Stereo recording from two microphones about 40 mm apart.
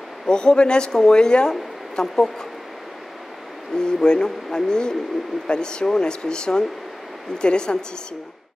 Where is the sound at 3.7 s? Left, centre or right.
Centre.